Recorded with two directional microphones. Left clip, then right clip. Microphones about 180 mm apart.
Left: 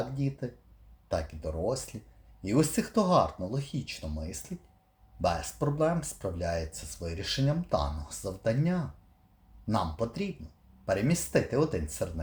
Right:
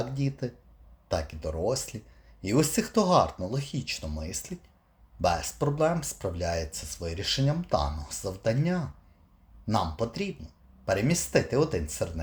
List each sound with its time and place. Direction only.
0.0 s speech: 20° right (ahead or behind)